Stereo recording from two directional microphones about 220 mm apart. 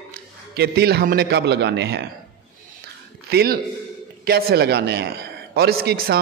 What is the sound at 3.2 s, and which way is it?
A man's voice, 45° right (ahead or behind).